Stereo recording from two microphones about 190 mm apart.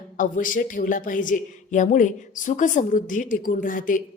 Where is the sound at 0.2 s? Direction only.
45° left (ahead or behind).